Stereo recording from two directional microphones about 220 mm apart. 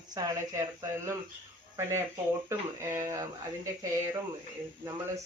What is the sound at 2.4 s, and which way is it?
Speech, 10° right (ahead or behind).